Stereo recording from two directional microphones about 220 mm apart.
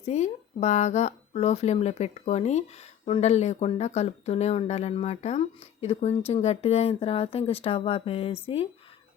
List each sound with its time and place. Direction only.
0.0 s speech: 30° left (ahead or behind)